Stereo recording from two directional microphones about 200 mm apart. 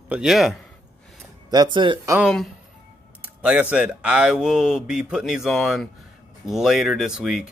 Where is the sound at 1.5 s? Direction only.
25° right (ahead or behind).